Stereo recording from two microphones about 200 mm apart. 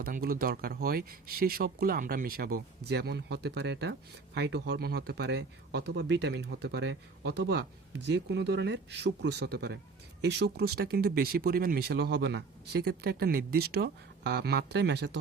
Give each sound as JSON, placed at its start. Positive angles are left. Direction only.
{"t": 0.0, "sound": "speech", "side_deg": -50}